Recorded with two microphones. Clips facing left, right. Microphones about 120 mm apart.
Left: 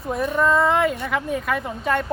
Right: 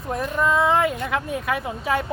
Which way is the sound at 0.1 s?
Centre (ahead or behind).